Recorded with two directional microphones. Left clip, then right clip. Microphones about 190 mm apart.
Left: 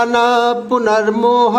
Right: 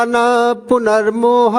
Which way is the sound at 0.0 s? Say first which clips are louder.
Even; 50° right (ahead or behind).